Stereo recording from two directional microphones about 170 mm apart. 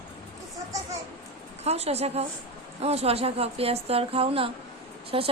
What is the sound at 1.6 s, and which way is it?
A woman's voice, 40° right (ahead or behind).